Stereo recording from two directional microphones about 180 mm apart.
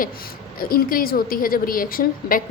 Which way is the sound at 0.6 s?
55° left (ahead or behind).